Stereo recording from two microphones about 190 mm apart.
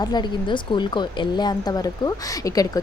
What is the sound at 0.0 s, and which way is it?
A woman's voice, 20° left (ahead or behind).